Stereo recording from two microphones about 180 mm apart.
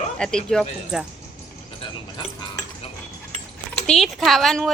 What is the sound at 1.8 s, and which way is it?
Speech, 25° left (ahead or behind).